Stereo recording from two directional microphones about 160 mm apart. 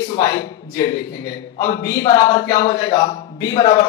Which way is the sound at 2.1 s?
25° left (ahead or behind).